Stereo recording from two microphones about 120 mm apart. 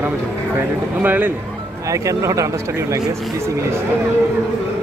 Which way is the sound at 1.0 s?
15° right (ahead or behind).